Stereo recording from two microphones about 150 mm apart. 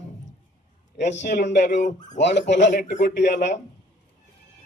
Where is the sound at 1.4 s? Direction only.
55° left (ahead or behind).